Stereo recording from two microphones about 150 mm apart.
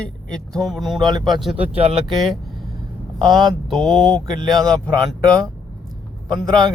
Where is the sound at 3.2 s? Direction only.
30° right (ahead or behind).